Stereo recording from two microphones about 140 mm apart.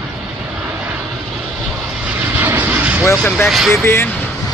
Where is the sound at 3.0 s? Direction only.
15° left (ahead or behind).